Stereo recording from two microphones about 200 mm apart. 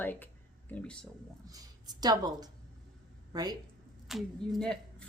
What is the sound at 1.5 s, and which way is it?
A woman's voice, 20° right (ahead or behind).